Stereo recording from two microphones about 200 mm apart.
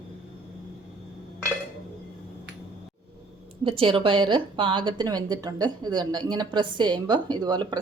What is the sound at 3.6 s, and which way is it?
A woman's voice, 25° right (ahead or behind).